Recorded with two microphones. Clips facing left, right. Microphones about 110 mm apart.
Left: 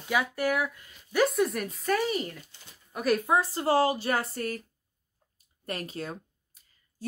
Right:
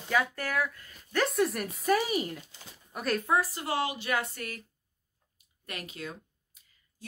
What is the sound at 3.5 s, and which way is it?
Speech, 35° left (ahead or behind).